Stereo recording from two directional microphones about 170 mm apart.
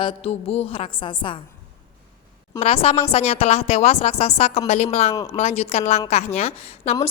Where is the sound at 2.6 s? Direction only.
35° left (ahead or behind).